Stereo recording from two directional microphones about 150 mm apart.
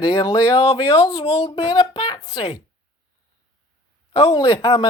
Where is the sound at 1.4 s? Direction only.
25° left (ahead or behind).